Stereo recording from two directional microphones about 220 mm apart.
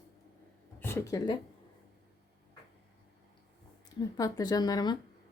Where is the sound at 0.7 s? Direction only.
10° left (ahead or behind).